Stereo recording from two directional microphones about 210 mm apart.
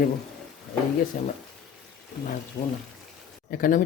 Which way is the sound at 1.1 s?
40° left (ahead or behind).